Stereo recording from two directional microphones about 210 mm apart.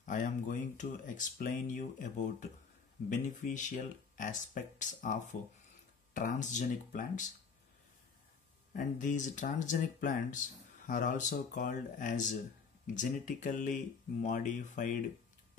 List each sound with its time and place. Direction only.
0.0 s speech: 40° left (ahead or behind)
8.7 s speech: 35° left (ahead or behind)